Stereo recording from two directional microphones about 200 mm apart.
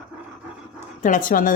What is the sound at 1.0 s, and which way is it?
Speech, 40° left (ahead or behind).